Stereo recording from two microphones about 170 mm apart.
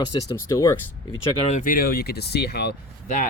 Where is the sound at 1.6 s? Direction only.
60° left (ahead or behind).